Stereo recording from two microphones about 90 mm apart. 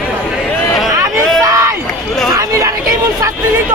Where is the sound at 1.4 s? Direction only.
35° right (ahead or behind).